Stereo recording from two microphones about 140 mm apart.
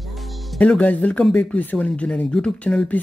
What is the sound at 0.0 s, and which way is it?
Speech, centre (ahead or behind).